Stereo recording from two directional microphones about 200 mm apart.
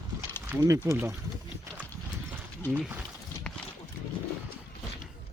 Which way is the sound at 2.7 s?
5° right (ahead or behind).